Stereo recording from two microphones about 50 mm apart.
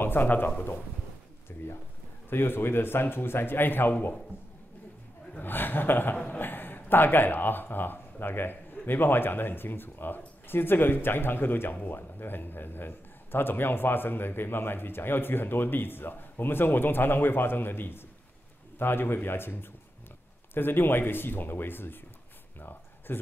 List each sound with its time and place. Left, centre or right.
0.0 s speech: left
1.5 s a man's voice: left
5.4 s a man's voice: left
22.6 s a sound: left